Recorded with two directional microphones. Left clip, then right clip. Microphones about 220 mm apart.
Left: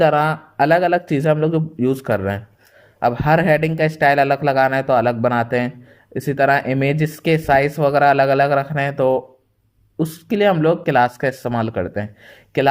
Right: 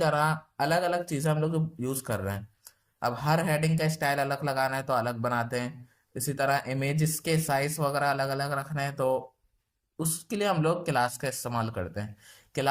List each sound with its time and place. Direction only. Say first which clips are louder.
0.0 s speech: left 11 dB; 35° left (ahead or behind)